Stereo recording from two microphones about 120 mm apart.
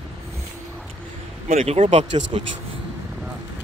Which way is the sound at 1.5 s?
60° right (ahead or behind).